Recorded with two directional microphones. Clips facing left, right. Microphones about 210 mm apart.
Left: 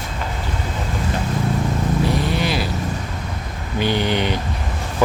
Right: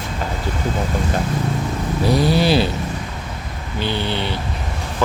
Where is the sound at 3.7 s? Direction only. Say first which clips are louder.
Left 3 dB; 15° left (ahead or behind).